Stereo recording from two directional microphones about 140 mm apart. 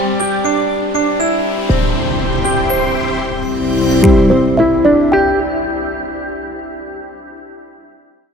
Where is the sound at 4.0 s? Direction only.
Centre (ahead or behind).